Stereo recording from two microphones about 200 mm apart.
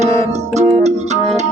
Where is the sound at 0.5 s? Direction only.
35° right (ahead or behind).